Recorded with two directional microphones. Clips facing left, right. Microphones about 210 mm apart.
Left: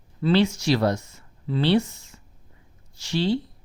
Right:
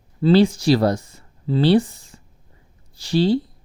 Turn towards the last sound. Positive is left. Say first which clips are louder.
# right 6 dB
turn(degrees=-35)  # may be behind; listen again after turning